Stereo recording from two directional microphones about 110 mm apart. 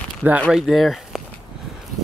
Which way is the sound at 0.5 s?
Centre (ahead or behind).